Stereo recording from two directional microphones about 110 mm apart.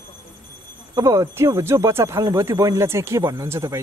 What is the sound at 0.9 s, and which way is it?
Speech, 30° right (ahead or behind).